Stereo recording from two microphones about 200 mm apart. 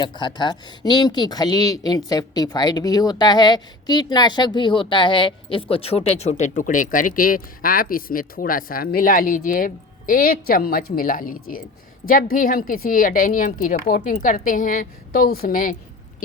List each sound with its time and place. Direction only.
0.0 s a woman's voice: 20° left (ahead or behind); by 15.7 s 45° left (ahead or behind)